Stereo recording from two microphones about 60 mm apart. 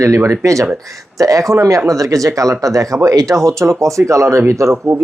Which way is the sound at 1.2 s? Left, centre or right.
Right.